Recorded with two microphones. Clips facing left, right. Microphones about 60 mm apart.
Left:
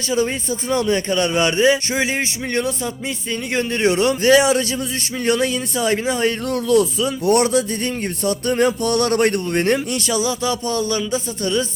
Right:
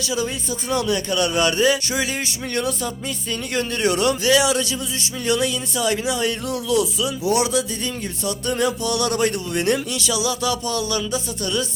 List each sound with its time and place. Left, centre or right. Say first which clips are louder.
0.7 s speech: left 3 dB; left
7.3 s music: left 4 dB; left
8.2 s speech: left 4 dB; left